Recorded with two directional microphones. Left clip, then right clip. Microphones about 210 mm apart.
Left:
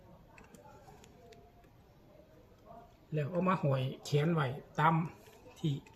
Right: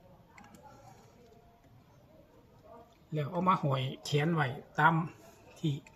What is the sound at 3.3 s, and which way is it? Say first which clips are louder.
Speech: right 3 dB; 5° left (ahead or behind).